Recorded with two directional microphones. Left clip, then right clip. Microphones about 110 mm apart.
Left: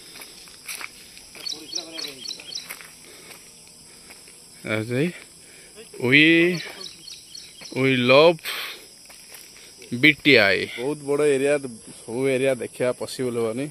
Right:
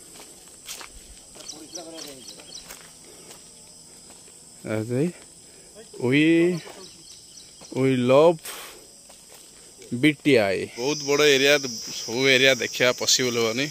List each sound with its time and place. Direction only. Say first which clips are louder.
0.2 s walk: left 4 dB; 5° left (ahead or behind)
1.4 s a sound: left 7 dB; 5° right (ahead or behind)
2.6 s a sound: left 5 dB; 20° left (ahead or behind)
4.6 s speech: left 2 dB; 10° right (ahead or behind)
9.9 s speech: left 4 dB; 10° right (ahead or behind)
11.1 s cricket: right 2 dB; 5° right (ahead or behind)
11.9 s cricket: right 4 dB; 5° left (ahead or behind)